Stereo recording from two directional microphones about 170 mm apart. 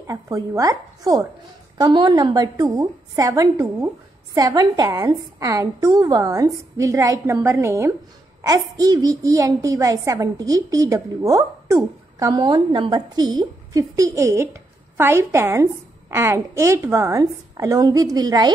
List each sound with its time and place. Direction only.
0.0 s a woman's voice: 20° right (ahead or behind)